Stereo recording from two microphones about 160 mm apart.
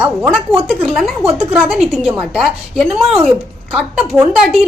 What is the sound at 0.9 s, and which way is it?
A woman's voice, centre (ahead or behind).